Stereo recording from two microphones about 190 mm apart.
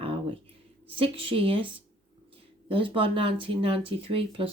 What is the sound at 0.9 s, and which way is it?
Speech, 30° right (ahead or behind).